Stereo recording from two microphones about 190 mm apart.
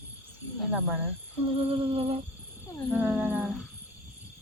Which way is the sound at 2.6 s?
15° left (ahead or behind).